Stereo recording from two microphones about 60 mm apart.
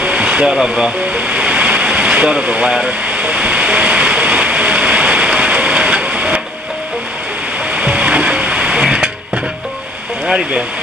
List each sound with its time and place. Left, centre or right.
0.0 s a sound: centre
7.7 s music: centre
10.2 s speech: centre